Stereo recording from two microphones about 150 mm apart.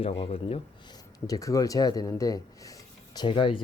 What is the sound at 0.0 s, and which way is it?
Speech, 40° left (ahead or behind).